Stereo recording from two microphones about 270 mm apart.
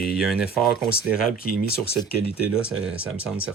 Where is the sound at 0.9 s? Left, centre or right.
Left.